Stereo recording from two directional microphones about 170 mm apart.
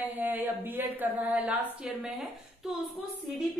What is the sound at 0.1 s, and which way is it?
Speech, 10° right (ahead or behind).